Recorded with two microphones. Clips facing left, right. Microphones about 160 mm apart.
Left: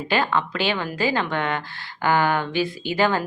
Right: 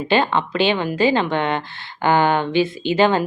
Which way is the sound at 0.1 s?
25° right (ahead or behind).